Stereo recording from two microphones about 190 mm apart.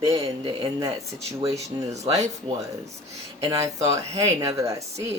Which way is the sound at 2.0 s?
35° right (ahead or behind).